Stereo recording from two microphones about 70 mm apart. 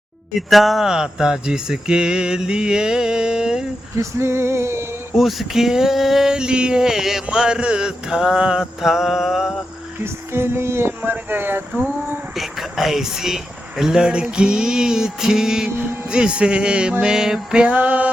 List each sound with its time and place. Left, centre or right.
0.3 s speech: centre
3.9 s speech: right
5.1 s a sound: centre
7.3 s speech: centre
10.0 s speech: right
12.3 s speech: centre